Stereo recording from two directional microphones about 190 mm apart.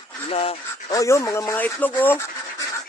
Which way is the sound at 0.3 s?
30° left (ahead or behind).